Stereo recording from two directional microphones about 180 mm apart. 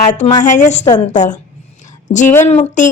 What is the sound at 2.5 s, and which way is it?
Speech, 40° left (ahead or behind).